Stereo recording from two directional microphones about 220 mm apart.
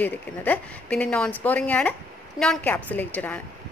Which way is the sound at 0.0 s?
10° left (ahead or behind).